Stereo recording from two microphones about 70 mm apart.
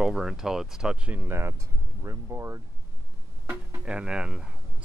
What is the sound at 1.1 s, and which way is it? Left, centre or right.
Speech, right.